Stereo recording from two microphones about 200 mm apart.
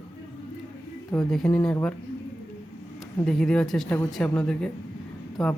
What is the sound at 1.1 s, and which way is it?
Speech, centre (ahead or behind).